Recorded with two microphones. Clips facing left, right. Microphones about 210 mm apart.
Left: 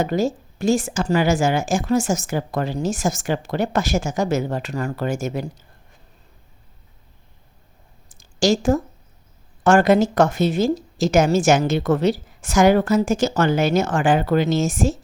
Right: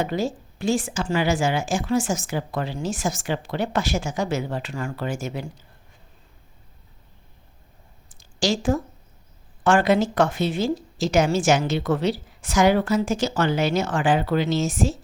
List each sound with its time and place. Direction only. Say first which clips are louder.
0.0 s a woman's voice: left 4 dB; 45° left (ahead or behind)
8.1 s a sound: left 5 dB; 45° left (ahead or behind)
9.6 s a woman's voice: left 4 dB; 45° left (ahead or behind)